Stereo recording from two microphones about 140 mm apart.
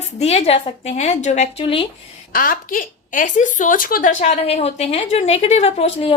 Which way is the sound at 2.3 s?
90° left.